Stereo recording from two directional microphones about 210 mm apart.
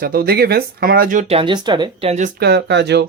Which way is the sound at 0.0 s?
45° right (ahead or behind).